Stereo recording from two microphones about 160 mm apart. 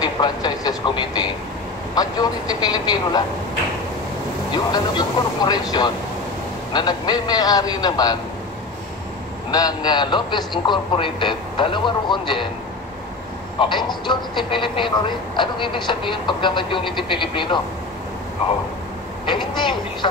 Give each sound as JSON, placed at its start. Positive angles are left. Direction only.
{"t": 0.0, "sound": "vehicle", "side_deg": 25}
{"t": 2.0, "sound": "a man's voice", "side_deg": 25}
{"t": 4.7, "sound": "a man's voice", "side_deg": 25}
{"t": 9.5, "sound": "a man's voice", "side_deg": 25}
{"t": 13.6, "sound": "speech", "side_deg": 30}
{"t": 19.2, "sound": "a man's voice", "side_deg": 30}